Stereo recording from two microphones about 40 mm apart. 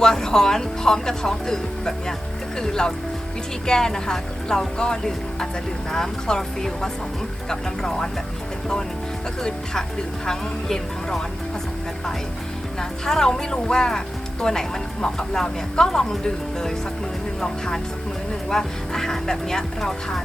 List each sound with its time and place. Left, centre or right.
0.0 s a woman's voice: centre
10.2 s a woman's voice: centre
13.1 s a woman's voice: centre
18.5 s a woman's voice: centre